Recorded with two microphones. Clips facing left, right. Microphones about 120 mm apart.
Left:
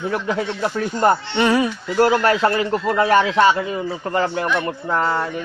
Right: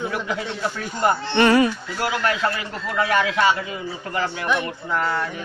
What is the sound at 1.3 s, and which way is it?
Speech, 5° left (ahead or behind).